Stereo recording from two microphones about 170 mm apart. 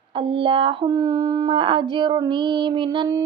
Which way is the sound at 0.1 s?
30° right (ahead or behind).